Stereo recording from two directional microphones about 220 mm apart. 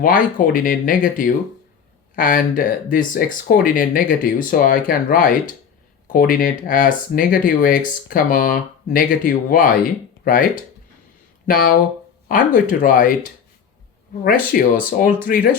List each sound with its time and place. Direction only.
0.0 s speech: 40° left (ahead or behind)
14.3 s speech: 40° left (ahead or behind)